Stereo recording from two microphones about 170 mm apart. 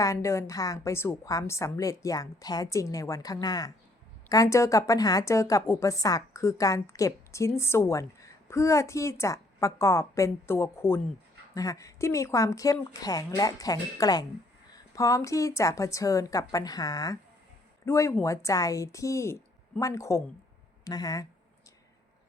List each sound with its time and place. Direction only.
0.0 s a woman's voice: 20° left (ahead or behind)